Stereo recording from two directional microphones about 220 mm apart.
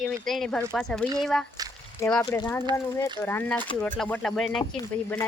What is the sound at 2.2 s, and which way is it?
Speech, 15° left (ahead or behind).